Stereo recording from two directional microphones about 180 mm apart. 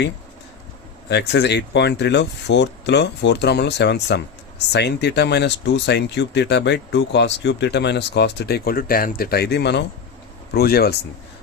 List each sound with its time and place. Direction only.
1.1 s speech: 70° left (ahead or behind)